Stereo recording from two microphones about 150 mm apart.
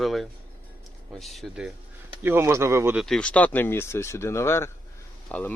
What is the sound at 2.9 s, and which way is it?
Speech, 5° left (ahead or behind).